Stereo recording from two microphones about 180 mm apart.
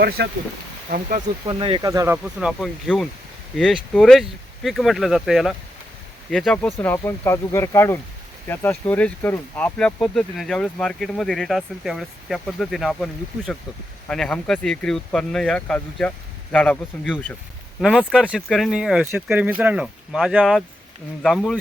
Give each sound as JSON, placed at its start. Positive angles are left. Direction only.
{"t": 0.2, "sound": "speech", "side_deg": -65}
{"t": 0.9, "sound": "speech", "side_deg": -50}
{"t": 1.5, "sound": "speech", "side_deg": -30}
{"t": 1.9, "sound": "speech", "side_deg": -15}
{"t": 2.4, "sound": "speech", "side_deg": 0}